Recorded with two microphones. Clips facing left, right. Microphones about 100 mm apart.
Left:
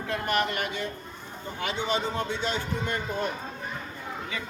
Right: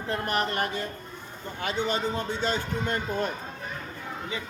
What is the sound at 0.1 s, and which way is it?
Speech, 35° right (ahead or behind).